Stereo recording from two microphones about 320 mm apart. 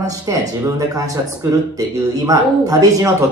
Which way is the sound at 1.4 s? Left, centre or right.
Centre.